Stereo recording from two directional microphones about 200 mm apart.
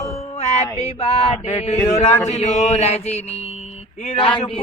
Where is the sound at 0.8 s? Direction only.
30° left (ahead or behind).